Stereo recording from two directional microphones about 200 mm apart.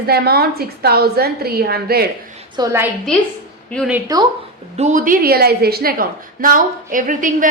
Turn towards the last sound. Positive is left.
turn(degrees=-40)  # may be behind; listen again after turning